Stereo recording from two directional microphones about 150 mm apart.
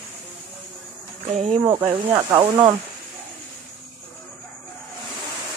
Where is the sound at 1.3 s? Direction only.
40° right (ahead or behind).